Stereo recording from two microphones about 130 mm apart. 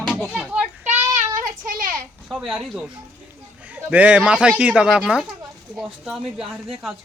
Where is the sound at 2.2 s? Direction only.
5° right (ahead or behind).